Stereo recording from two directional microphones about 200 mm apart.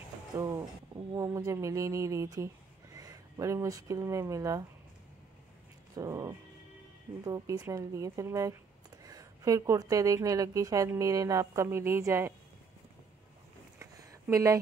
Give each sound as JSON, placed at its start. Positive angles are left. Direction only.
{"t": 1.1, "sound": "speech", "side_deg": -15}
{"t": 5.9, "sound": "speech", "side_deg": -15}
{"t": 13.7, "sound": "a sound", "side_deg": -15}